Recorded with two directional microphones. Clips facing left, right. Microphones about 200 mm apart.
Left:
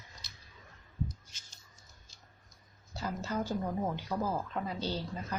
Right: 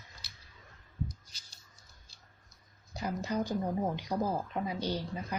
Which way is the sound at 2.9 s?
15° right (ahead or behind).